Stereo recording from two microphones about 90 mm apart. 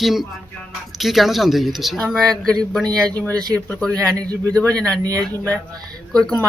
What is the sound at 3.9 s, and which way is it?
Speech, 45° right (ahead or behind).